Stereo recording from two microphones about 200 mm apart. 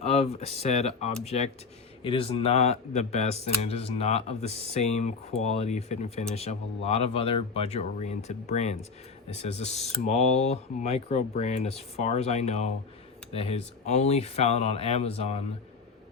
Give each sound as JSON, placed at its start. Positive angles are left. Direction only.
{"t": 0.0, "sound": "speech", "side_deg": 30}